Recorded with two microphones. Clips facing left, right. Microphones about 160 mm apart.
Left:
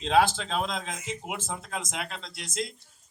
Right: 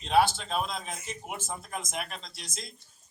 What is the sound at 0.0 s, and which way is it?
A man's voice, 90° left.